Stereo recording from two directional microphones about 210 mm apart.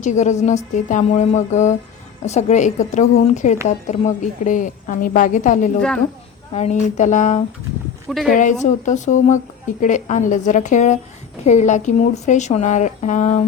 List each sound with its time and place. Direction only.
0.0 s a woman's voice: 35° left (ahead or behind)